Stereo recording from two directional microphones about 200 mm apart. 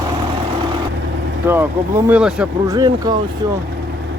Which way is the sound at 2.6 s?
20° right (ahead or behind).